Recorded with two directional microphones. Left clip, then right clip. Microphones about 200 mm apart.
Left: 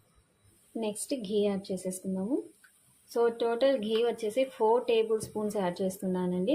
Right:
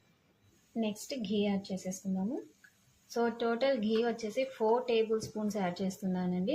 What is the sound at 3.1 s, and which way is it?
Speech, 20° left (ahead or behind).